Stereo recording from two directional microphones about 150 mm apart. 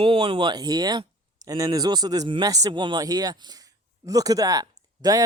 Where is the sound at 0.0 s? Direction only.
35° right (ahead or behind).